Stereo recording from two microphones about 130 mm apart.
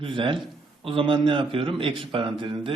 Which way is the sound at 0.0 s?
40° right (ahead or behind).